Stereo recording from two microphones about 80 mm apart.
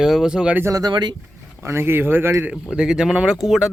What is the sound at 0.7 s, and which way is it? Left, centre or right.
Speech, right.